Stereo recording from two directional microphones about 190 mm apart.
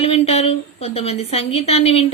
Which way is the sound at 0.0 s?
30° left (ahead or behind).